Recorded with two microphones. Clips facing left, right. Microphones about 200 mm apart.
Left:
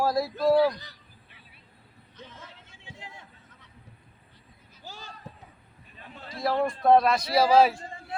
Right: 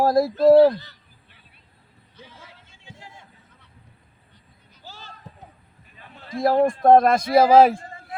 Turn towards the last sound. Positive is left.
turn(degrees=-50)  # may be behind; listen again after turning